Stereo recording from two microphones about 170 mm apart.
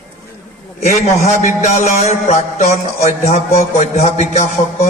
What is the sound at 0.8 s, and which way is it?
A man's voice, 45° left (ahead or behind).